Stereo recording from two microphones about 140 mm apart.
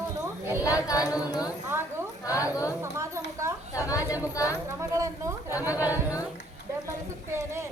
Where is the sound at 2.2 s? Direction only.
25° left (ahead or behind).